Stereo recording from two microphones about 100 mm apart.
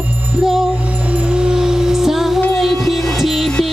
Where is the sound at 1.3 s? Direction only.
10° right (ahead or behind).